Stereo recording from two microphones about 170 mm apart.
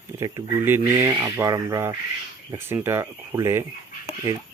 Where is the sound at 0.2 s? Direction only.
15° right (ahead or behind).